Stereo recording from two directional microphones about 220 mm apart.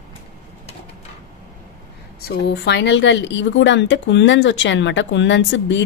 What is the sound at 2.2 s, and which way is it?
Speech, 50° left (ahead or behind).